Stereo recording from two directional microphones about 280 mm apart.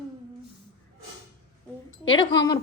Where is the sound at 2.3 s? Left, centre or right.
Centre.